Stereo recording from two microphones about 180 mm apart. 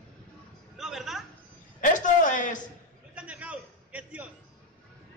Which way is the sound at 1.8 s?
45° left (ahead or behind).